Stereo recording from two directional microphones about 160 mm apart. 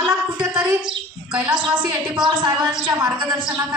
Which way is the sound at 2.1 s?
25° right (ahead or behind).